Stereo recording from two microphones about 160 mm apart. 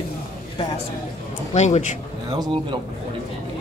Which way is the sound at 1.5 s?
45° left (ahead or behind).